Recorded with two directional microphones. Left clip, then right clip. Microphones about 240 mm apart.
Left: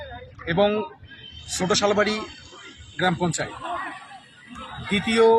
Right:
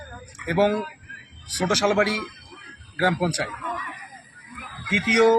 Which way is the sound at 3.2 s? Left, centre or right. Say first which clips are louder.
Right 1 dB; centre.